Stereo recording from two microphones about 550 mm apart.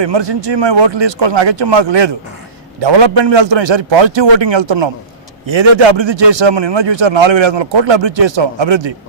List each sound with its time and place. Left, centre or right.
0.0 s a man's voice: right